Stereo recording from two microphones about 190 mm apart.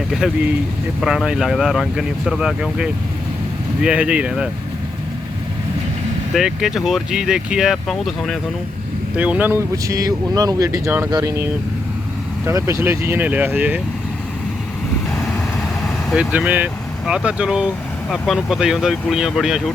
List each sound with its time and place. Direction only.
1.0 s speech: 5° right (ahead or behind)
6.3 s speech: 5° right (ahead or behind); by 11.4 s 20° right (ahead or behind)
12.5 s speech: 15° right (ahead or behind)
15.1 s vehicle: 5° left (ahead or behind)
17.1 s speech: 5° right (ahead or behind)